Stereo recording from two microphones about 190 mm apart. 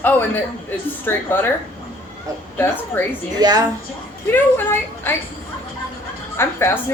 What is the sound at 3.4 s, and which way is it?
Speech, 20° right (ahead or behind).